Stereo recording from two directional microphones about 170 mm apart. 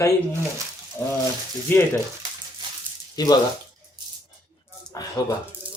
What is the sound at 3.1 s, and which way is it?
Speech, 25° left (ahead or behind).